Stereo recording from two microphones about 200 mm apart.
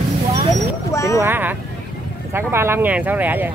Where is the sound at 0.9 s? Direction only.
15° left (ahead or behind).